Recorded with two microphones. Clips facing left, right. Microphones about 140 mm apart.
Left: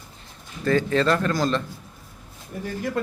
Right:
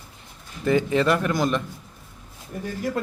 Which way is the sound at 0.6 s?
15° right (ahead or behind).